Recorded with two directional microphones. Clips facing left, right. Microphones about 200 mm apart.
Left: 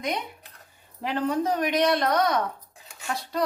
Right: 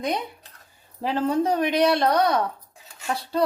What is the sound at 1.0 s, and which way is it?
A woman's voice, 30° right (ahead or behind).